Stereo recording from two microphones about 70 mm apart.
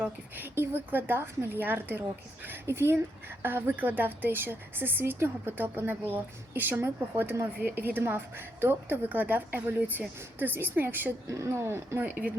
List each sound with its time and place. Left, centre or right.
0.0 s speech: right
11.3 s speech: right